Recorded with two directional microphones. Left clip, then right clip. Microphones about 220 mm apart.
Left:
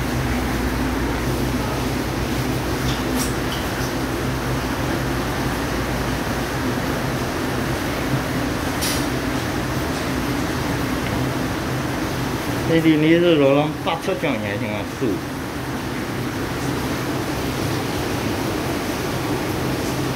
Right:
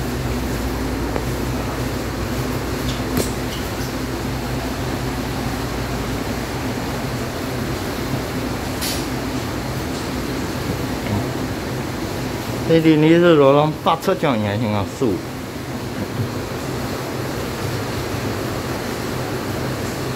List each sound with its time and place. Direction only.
12.7 s speech: 25° right (ahead or behind)